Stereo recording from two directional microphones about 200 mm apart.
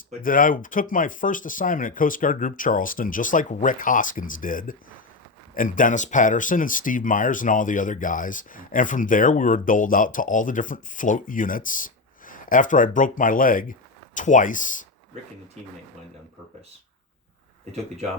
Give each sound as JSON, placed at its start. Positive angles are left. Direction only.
{"t": 0.2, "sound": "speech", "side_deg": 45}